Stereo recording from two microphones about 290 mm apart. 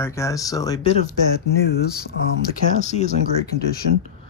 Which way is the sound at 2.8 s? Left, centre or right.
Left.